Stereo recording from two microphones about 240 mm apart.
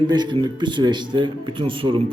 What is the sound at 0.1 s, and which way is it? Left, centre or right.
Speech, centre.